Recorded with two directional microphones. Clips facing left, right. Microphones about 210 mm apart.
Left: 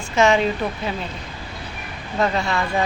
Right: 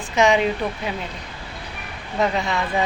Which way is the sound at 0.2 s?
15° right (ahead or behind).